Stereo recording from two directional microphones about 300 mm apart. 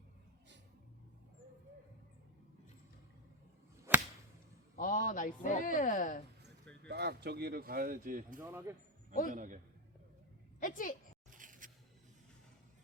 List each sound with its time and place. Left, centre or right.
3.9 s whip: centre
4.8 s speech: left
6.8 s speech: right
8.4 s speech: centre
9.3 s a man's voice: right
10.6 s speech: left
11.3 s a sound: right